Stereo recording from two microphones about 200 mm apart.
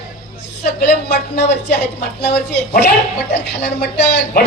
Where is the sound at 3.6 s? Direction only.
60° left (ahead or behind).